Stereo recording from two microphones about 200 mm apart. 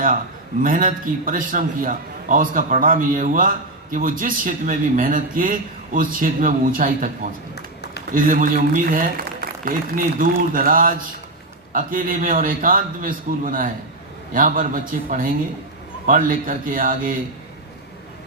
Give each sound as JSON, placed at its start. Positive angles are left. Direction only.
{"t": 0.6, "sound": "speech", "side_deg": -45}
{"t": 7.5, "sound": "run", "side_deg": 55}
{"t": 8.1, "sound": "speech", "side_deg": -40}